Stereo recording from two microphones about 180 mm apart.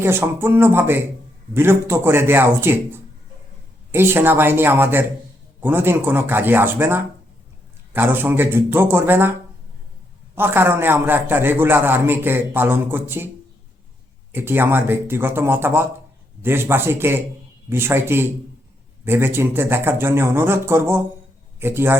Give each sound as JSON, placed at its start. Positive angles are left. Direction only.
{"t": 0.0, "sound": "a man's voice", "side_deg": -15}
{"t": 10.3, "sound": "a man's voice", "side_deg": -10}
{"t": 14.3, "sound": "a man's voice", "side_deg": -10}